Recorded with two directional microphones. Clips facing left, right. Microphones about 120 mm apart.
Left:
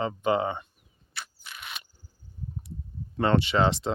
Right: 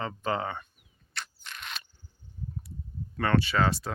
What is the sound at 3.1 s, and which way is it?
Speech, 25° left (ahead or behind).